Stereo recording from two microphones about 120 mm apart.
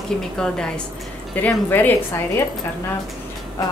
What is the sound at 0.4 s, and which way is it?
A woman's voice, 5° left (ahead or behind).